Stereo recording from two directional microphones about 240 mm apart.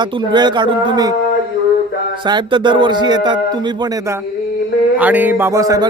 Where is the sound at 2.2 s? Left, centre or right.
Centre.